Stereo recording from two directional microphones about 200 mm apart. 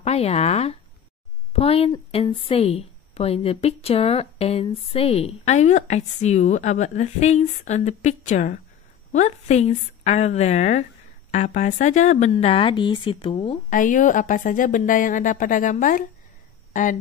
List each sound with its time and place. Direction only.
0.0 s a woman's voice: 30° left (ahead or behind)
13.7 s a woman's voice: 40° left (ahead or behind)